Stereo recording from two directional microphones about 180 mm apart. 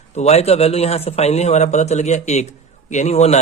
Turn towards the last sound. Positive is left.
turn(degrees=40)  # may be behind; listen again after turning